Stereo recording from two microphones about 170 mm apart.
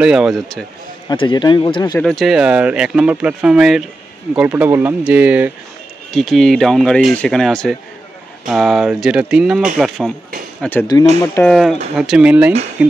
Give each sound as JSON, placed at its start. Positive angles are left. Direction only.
{"t": 0.0, "sound": "speech", "side_deg": -5}
{"t": 1.0, "sound": "speech", "side_deg": 25}
{"t": 2.0, "sound": "speech", "side_deg": 0}
{"t": 6.1, "sound": "speech", "side_deg": 0}
{"t": 10.6, "sound": "speech", "side_deg": 10}